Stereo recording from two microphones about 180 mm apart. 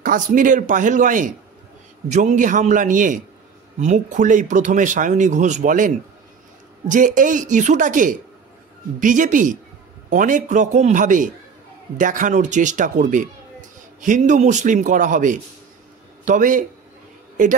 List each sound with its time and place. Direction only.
0.0 s speech: 50° right (ahead or behind)